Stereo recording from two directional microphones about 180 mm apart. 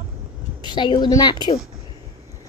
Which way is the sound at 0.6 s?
25° left (ahead or behind).